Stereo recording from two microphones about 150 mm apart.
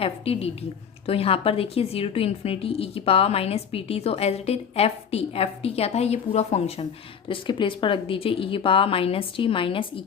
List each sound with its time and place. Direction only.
0.0 s a woman's voice: 40° left (ahead or behind)
7.3 s a woman's voice: 35° left (ahead or behind)